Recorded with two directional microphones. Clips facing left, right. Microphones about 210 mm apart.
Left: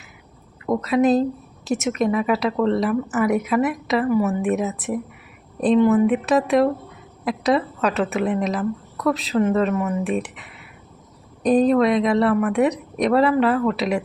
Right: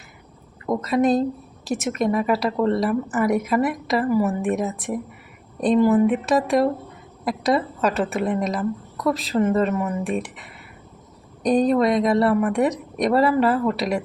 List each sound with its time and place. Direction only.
0.7 s a woman's voice: centre (ahead or behind)
11.4 s a woman's voice: centre (ahead or behind)